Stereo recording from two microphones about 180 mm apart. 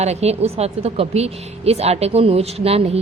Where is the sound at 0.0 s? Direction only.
35° right (ahead or behind).